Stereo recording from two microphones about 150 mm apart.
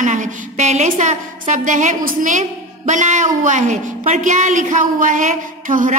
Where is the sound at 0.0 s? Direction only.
55° right (ahead or behind).